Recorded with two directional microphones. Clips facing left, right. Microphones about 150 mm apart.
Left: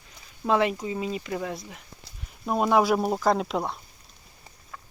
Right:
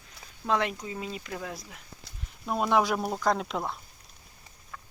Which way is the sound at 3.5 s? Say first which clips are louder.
Left 4 dB; centre (ahead or behind).